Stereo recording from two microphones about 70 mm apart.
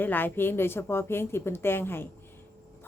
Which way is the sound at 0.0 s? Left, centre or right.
Left.